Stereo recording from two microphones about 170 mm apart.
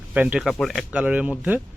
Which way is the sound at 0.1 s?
10° right (ahead or behind).